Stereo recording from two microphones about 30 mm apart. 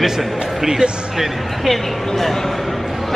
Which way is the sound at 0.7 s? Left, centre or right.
Right.